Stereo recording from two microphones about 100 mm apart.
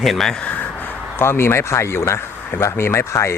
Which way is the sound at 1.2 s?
25° left (ahead or behind).